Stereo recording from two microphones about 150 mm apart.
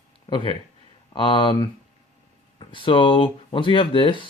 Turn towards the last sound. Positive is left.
turn(degrees=35)  # may be behind; listen again after turning